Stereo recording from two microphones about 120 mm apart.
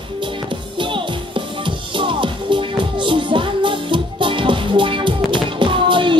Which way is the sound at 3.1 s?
45° right (ahead or behind).